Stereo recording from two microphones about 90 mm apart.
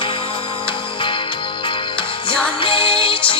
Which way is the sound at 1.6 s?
70° left (ahead or behind).